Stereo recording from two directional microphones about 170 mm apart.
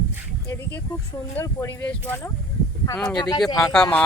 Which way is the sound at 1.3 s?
15° left (ahead or behind).